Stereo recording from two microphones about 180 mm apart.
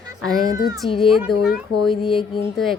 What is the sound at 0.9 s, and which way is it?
Speech, 30° left (ahead or behind).